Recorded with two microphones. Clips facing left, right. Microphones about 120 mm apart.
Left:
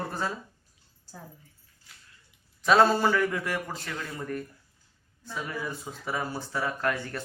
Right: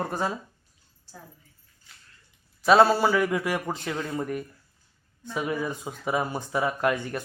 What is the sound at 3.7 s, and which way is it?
A man's voice, 25° right (ahead or behind).